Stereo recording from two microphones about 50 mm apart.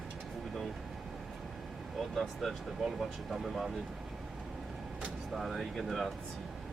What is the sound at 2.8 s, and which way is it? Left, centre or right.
Speech, centre.